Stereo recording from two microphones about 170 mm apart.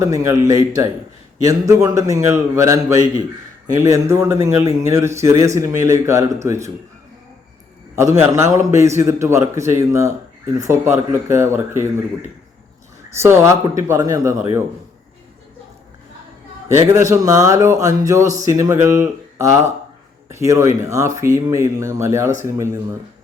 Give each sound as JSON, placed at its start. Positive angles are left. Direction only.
{"t": 0.0, "sound": "a man's voice", "side_deg": -20}
{"t": 8.2, "sound": "speech", "side_deg": -15}
{"t": 13.1, "sound": "speech", "side_deg": -15}
{"t": 16.9, "sound": "a man's voice", "side_deg": -20}